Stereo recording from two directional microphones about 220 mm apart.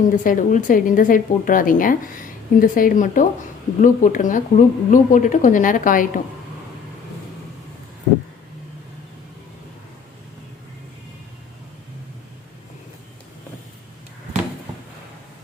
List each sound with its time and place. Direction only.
0.1 s speech: 35° left (ahead or behind)